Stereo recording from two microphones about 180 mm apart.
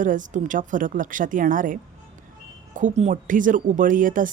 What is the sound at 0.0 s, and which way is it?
Speech, 45° right (ahead or behind).